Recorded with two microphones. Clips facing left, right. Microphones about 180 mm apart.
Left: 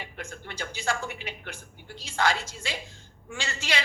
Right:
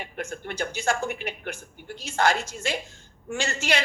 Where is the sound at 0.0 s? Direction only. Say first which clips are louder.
Right 6 dB; 50° right (ahead or behind).